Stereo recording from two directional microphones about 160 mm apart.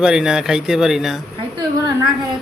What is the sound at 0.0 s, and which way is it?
Speech, 5° right (ahead or behind).